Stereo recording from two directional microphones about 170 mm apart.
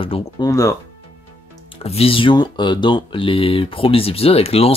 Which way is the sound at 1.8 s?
35° left (ahead or behind).